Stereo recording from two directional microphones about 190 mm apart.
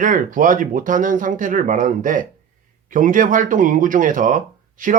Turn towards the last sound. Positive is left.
turn(degrees=-45)  # may be behind; listen again after turning